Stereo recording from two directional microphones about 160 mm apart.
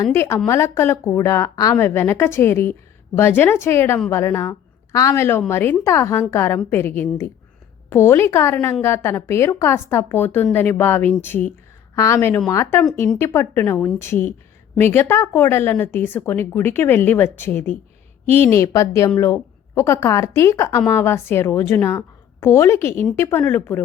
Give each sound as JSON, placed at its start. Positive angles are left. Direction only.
{"t": 0.1, "sound": "a woman's voice", "side_deg": 15}